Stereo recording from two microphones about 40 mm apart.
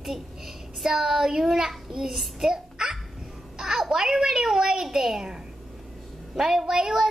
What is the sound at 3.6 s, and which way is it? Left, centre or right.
A woman's voice, centre.